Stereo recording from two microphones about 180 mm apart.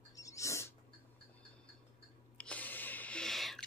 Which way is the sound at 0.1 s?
15° left (ahead or behind).